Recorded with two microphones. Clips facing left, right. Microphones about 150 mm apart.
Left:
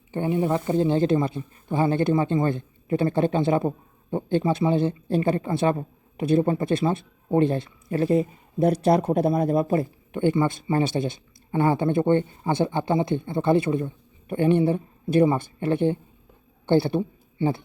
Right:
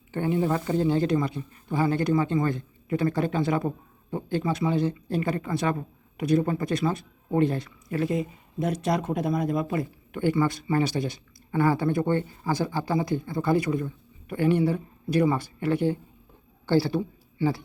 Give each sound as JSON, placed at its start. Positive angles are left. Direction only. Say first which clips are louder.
{"t": 0.1, "sound": "speech", "louder": "left 2 dB", "side_deg": 20}